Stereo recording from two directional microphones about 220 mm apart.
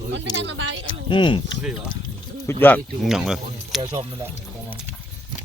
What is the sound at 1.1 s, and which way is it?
Speech, 20° left (ahead or behind).